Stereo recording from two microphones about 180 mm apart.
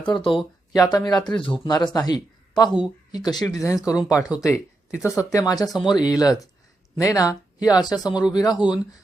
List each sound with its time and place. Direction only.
0.0 s speech: 25° left (ahead or behind)